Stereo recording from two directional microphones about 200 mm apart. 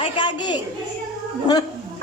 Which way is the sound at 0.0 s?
25° left (ahead or behind).